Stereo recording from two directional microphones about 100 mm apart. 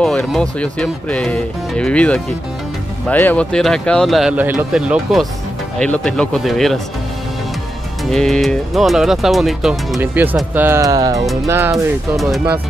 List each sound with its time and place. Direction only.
0.0 s speech: 5° left (ahead or behind)
3.5 s speech: 5° left (ahead or behind)
4.3 s speech: 20° right (ahead or behind)
4.7 s speech: 10° right (ahead or behind)
5.8 s speech: 10° left (ahead or behind)
8.0 s speech: 5° left (ahead or behind)
10.2 s speech: 20° right (ahead or behind)
10.8 s speech: 35° right (ahead or behind)